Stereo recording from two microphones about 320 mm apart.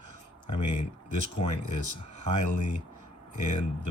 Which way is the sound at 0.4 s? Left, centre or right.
Left.